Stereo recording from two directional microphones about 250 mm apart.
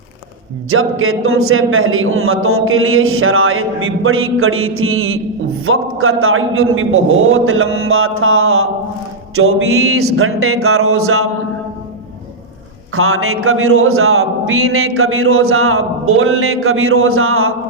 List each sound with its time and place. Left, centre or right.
0.7 s speech: right
9.9 s speech: right
12.9 s speech: right